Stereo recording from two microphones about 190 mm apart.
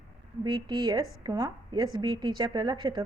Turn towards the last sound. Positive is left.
turn(degrees=-25)  # may be behind; listen again after turning